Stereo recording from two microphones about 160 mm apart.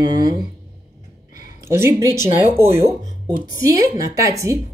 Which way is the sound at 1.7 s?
20° right (ahead or behind).